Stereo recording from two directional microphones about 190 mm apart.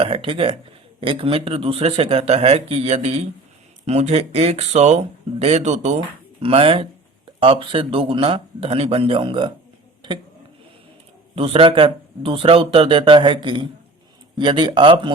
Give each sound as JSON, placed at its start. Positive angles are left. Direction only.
{"t": 0.0, "sound": "speech", "side_deg": -30}
{"t": 11.3, "sound": "speech", "side_deg": -30}